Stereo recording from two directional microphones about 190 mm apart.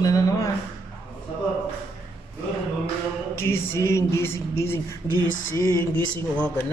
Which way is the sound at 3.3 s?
10° left (ahead or behind).